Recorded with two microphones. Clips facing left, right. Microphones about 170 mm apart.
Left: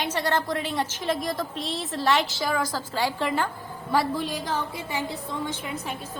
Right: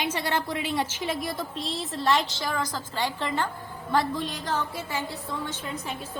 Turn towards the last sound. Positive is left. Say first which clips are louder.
# left 2 dB
turn(degrees=15)  # may be behind; listen again after turning